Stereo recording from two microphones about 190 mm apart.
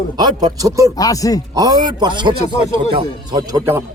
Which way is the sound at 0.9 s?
20° left (ahead or behind).